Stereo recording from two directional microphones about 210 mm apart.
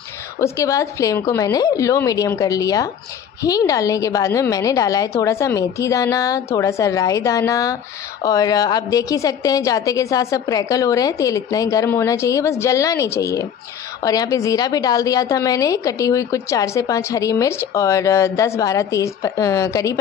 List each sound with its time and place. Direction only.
0.4 s a woman's voice: 15° left (ahead or behind)